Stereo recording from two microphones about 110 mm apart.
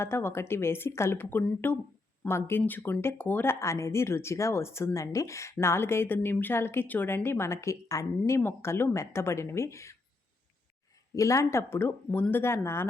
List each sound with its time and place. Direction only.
0.0 s speech: 20° left (ahead or behind)
11.1 s speech: 30° left (ahead or behind)